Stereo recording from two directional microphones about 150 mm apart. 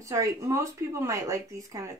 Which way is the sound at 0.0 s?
20° right (ahead or behind).